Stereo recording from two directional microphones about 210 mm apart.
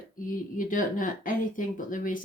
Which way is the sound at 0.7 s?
40° left (ahead or behind).